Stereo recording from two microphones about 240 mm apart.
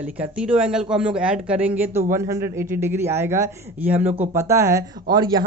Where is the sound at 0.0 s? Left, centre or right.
Centre.